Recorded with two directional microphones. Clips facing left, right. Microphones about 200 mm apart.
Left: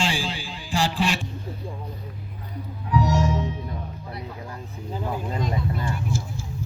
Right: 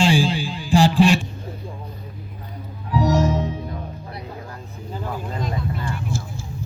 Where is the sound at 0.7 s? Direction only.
15° right (ahead or behind).